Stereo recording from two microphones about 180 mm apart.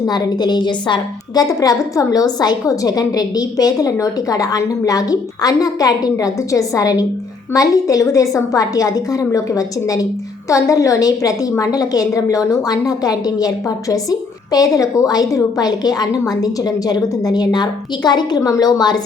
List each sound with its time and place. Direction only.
0.0 s a woman's voice: 20° left (ahead or behind)